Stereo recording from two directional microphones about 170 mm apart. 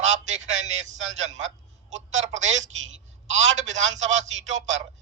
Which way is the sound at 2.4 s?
90° right.